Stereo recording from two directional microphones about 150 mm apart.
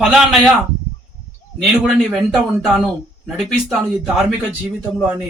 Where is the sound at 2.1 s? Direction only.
Centre (ahead or behind).